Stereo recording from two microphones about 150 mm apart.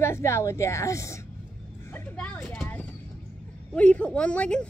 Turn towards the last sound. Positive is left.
turn(degrees=5)  # may be behind; listen again after turning